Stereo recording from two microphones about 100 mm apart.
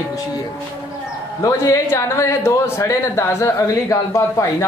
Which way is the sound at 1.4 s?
30° left (ahead or behind).